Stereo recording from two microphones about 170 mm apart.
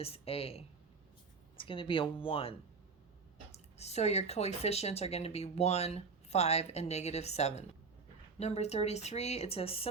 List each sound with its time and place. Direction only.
0.0 s speech: 35° left (ahead or behind)
3.8 s speech: 40° left (ahead or behind)